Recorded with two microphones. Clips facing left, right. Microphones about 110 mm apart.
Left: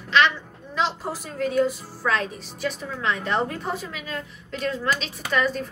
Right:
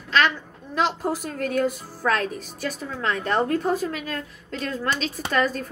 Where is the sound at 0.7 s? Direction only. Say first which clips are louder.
Right 3 dB; 55° right (ahead or behind).